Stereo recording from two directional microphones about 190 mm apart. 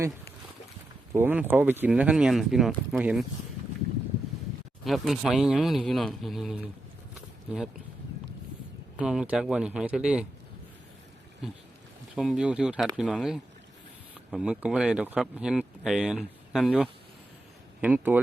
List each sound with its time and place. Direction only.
1.1 s speech: 10° right (ahead or behind)
4.9 s speech: centre (ahead or behind)
7.1 s a sound: 5° right (ahead or behind)
9.0 s speech: 5° right (ahead or behind)
12.1 s speech: centre (ahead or behind)